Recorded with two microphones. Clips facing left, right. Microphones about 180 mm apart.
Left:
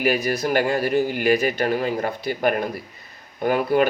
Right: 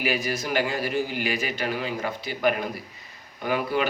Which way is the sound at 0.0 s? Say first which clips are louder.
Left 6 dB; 45° left (ahead or behind).